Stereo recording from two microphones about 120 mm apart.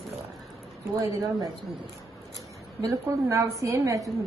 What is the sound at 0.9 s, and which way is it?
Speech, 30° right (ahead or behind).